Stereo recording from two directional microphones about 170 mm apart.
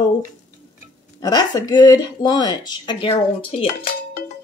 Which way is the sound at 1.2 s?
25° left (ahead or behind).